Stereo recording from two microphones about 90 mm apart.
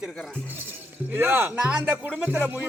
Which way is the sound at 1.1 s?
25° right (ahead or behind).